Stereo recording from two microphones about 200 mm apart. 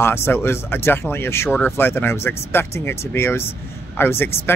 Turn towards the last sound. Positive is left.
turn(degrees=10)  # may be behind; listen again after turning